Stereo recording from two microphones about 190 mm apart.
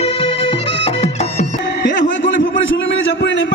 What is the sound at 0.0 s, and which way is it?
Music, 30° left (ahead or behind).